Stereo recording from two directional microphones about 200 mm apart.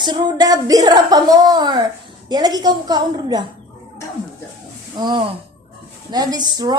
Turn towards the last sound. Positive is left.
turn(degrees=-20)  # may be behind; listen again after turning